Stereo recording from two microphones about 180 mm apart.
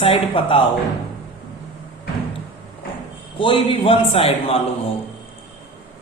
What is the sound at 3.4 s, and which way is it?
A man's voice, 25° left (ahead or behind).